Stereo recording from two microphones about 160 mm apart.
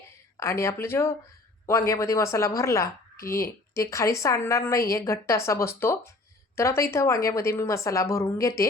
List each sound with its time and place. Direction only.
0.3 s a woman's voice: 15° left (ahead or behind)